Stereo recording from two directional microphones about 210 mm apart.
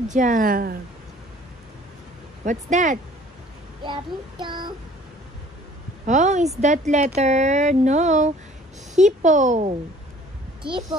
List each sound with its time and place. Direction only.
0.1 s speech: 40° right (ahead or behind)
2.4 s speech: 35° right (ahead or behind)
3.8 s child singing: 20° right (ahead or behind)
6.0 s speech: 35° right (ahead or behind)
10.6 s a child's voice: 20° right (ahead or behind)